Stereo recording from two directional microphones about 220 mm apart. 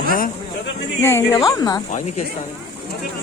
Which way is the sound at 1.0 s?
10° left (ahead or behind).